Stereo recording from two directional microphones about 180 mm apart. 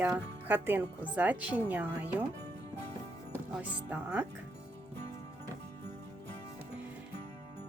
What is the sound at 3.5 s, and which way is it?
Speech, 5° right (ahead or behind).